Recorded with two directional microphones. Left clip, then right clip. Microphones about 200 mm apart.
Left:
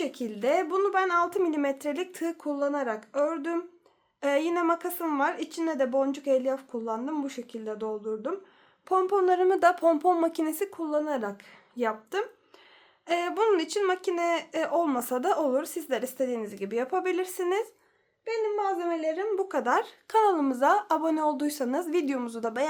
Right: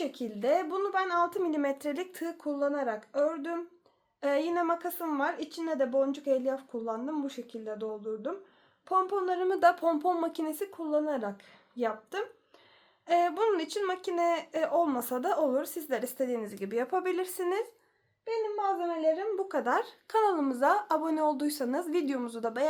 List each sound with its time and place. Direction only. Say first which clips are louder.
0.0 s speech: left 3 dB; 30° left (ahead or behind)